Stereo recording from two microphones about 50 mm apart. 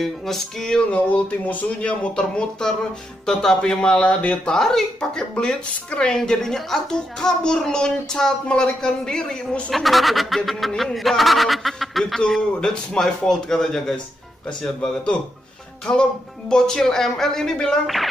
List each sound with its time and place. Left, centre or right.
0.0 s speech: centre
0.7 s speech: left
1.9 s a child's voice: centre
9.7 s a child's voice: centre